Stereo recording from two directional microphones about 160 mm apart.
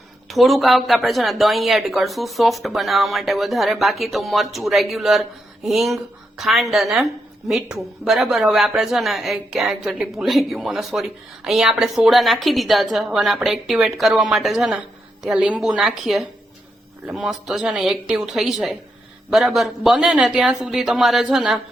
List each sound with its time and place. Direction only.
0.3 s a woman's voice: centre (ahead or behind)